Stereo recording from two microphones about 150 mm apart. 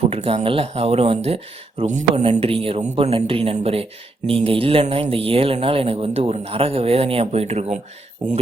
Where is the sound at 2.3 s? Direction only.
40° right (ahead or behind).